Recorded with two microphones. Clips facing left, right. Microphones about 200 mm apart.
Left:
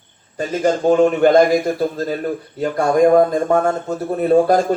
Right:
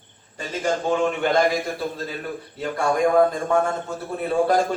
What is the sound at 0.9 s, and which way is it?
A man's voice, 40° left (ahead or behind).